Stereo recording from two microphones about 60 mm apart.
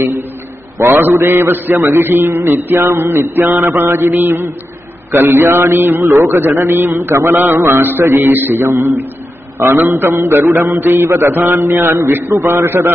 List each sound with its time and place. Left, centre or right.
0.7 s mantra: right
9.6 s a man's voice: right
10.5 s mantra: right